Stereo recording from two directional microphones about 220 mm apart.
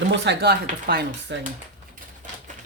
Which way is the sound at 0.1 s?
50° right (ahead or behind).